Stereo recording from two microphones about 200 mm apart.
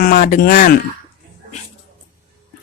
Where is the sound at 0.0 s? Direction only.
45° left (ahead or behind).